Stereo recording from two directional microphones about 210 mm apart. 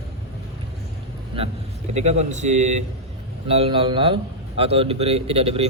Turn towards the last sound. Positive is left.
turn(degrees=-30)  # may be behind; listen again after turning